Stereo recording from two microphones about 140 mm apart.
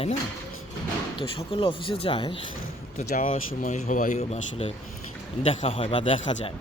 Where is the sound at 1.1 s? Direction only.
40° left (ahead or behind).